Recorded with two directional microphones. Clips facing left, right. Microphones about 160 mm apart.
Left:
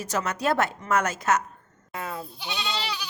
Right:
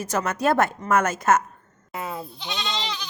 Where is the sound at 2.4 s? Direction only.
10° left (ahead or behind).